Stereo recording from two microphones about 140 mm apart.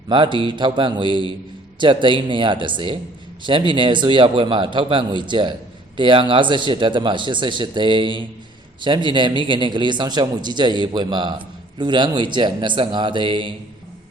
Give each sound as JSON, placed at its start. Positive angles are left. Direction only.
{"t": 0.1, "sound": "a man's voice", "side_deg": -35}